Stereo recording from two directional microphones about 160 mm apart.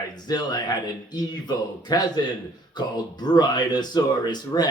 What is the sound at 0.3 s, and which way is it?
Speech, 25° left (ahead or behind).